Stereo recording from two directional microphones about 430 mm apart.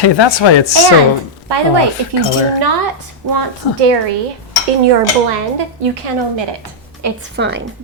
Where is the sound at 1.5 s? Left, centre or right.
Right.